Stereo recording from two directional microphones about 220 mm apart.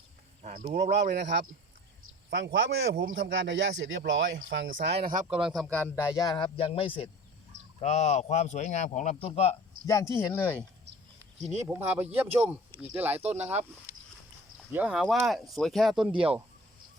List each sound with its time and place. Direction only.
0.4 s speech: 35° right (ahead or behind)
1.1 s speech: 50° right (ahead or behind)
3.1 s speech: 55° right (ahead or behind)
5.3 s speech: centre (ahead or behind)
6.1 s a man's voice: 15° left (ahead or behind)
9.8 s speech: 15° left (ahead or behind)
11.7 s speech: 10° right (ahead or behind)
13.1 s speech: 30° right (ahead or behind)
14.7 s speech: 5° right (ahead or behind)